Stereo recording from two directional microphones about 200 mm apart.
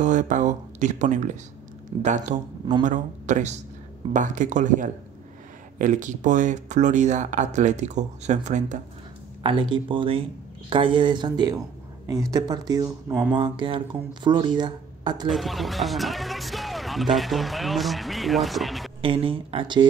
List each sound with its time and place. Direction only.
0.0 s speech: 40° right (ahead or behind)
9.4 s speech: 25° right (ahead or behind); by 13.4 s 10° right (ahead or behind)
13.4 s speech: 25° right (ahead or behind)
15.2 s speech: centre (ahead or behind)
18.9 s speech: 25° right (ahead or behind)